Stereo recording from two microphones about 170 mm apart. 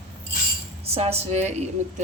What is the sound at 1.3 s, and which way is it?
Speech, 40° right (ahead or behind).